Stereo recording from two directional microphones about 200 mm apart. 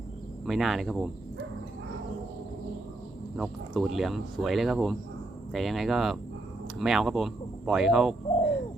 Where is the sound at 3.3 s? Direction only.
Centre (ahead or behind).